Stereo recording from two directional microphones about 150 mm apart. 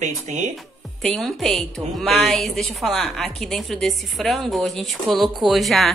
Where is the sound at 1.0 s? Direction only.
5° left (ahead or behind).